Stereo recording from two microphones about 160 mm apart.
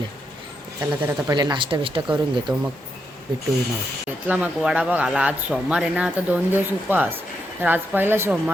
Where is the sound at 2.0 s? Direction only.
5° right (ahead or behind).